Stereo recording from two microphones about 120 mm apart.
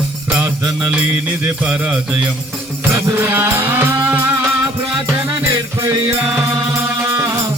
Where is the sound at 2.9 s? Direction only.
25° right (ahead or behind).